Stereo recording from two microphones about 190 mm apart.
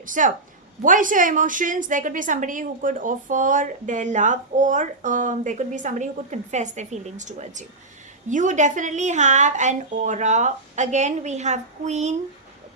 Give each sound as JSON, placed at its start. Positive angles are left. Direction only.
{"t": 0.0, "sound": "a woman's voice", "side_deg": -45}